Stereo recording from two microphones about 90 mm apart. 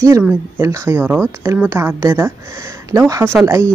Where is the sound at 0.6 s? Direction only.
35° right (ahead or behind).